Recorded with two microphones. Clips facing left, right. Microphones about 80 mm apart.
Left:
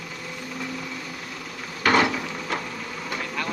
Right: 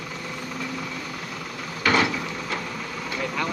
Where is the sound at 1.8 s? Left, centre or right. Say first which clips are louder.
Left 2 dB; left.